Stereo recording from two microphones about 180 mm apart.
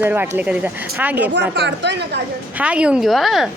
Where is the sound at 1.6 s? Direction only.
75° right (ahead or behind).